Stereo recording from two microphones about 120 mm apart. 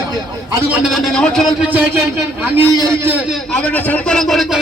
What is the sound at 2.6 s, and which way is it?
Speech, 30° right (ahead or behind).